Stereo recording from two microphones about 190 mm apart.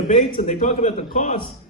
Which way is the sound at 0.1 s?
40° left (ahead or behind).